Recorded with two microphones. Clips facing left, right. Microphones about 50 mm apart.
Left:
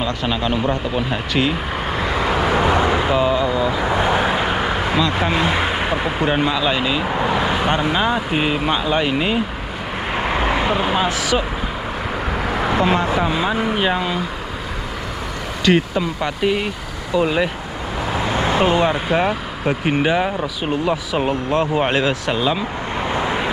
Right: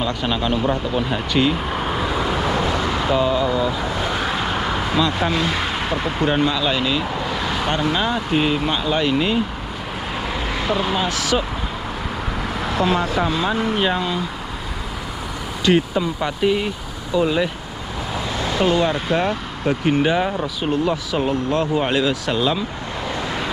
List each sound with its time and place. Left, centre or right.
0.0 s speech: centre
2.0 s vehicle: left; by 3.8 s centre
3.8 s vehicle: left
5.1 s speech: left
10.1 s vehicle: left
13.2 s speech: centre
16.0 s speech: centre
17.2 s speech: centre
21.3 s speech: left
22.3 s speech: centre
23.0 s vehicle: left